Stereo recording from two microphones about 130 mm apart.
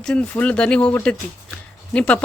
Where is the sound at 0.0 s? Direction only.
10° left (ahead or behind).